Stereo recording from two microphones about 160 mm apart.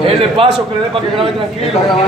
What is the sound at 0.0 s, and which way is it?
Speech, 35° right (ahead or behind).